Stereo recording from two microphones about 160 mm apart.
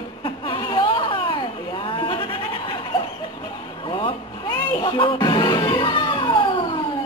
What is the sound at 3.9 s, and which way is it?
Music, 30° left (ahead or behind).